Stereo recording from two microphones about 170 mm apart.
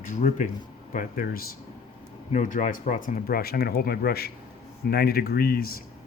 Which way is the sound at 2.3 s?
45° left (ahead or behind).